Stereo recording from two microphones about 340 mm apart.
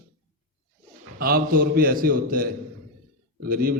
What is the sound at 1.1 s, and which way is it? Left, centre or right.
A man's voice, right.